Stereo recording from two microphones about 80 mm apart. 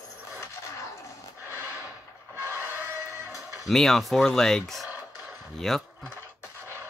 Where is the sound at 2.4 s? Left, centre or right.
Right.